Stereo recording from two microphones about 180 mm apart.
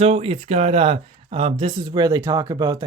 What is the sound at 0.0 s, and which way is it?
Speech, 35° right (ahead or behind).